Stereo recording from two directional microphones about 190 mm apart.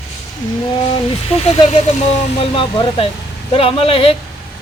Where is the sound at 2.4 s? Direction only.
30° left (ahead or behind).